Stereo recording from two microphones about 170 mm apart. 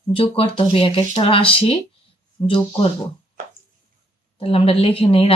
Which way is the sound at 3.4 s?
50° right (ahead or behind).